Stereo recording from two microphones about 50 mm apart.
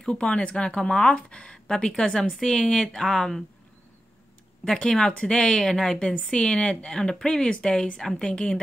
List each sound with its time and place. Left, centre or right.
0.1 s speech: left
4.7 s speech: centre